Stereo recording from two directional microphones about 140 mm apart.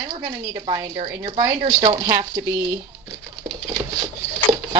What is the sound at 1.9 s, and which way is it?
Speech, 25° right (ahead or behind).